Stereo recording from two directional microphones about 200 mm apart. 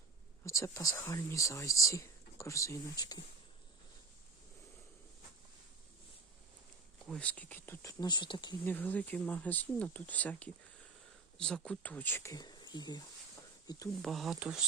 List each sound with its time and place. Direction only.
0.4 s speech: 15° left (ahead or behind)
7.1 s speech: 5° left (ahead or behind); by 8.5 s 20° left (ahead or behind)
8.6 s speech: 10° left (ahead or behind)
14.0 s speech: centre (ahead or behind)